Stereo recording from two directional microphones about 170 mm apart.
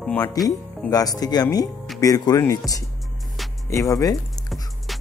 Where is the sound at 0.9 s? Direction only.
20° left (ahead or behind).